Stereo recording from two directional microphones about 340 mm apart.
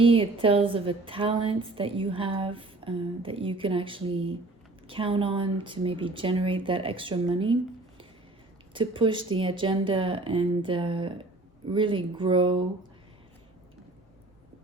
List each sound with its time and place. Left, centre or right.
0.0 s a woman's voice: centre